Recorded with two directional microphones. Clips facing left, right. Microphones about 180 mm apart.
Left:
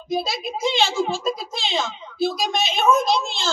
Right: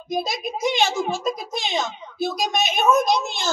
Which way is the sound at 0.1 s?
15° right (ahead or behind).